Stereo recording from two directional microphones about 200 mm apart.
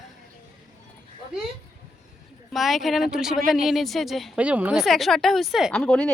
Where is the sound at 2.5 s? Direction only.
Centre (ahead or behind).